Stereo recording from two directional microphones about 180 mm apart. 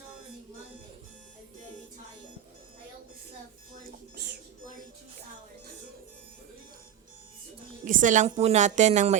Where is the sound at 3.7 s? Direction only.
55° right (ahead or behind).